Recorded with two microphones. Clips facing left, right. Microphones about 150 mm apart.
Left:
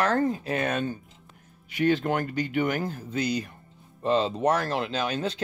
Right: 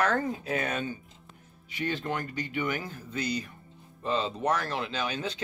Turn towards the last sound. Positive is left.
turn(degrees=50)  # may be behind; listen again after turning